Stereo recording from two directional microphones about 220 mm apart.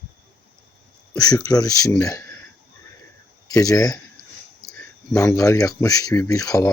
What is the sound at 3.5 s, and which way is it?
Speech, 15° left (ahead or behind).